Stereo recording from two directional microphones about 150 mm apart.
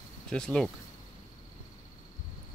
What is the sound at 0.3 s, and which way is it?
Speech, 5° left (ahead or behind).